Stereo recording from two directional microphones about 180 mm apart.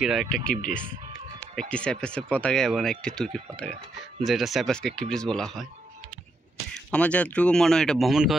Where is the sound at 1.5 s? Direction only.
5° left (ahead or behind).